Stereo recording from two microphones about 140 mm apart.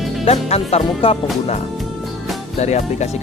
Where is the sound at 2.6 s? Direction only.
55° left (ahead or behind).